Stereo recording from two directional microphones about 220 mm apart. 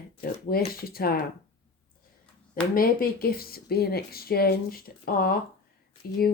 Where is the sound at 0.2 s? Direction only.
45° left (ahead or behind).